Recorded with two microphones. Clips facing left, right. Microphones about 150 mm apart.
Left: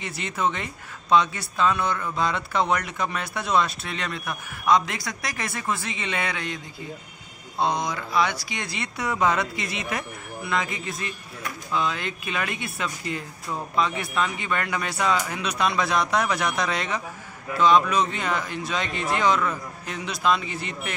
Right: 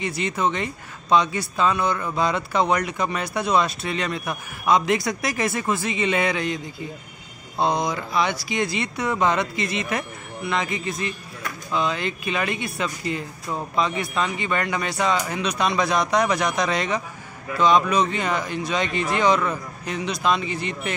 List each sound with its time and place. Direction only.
0.0 s speech: centre (ahead or behind)
5.2 s speech: 5° right (ahead or behind)
8.5 s speech: centre (ahead or behind)